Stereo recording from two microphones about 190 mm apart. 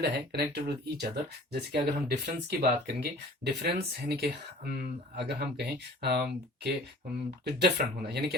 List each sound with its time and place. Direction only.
0.0 s speech: 60° right (ahead or behind)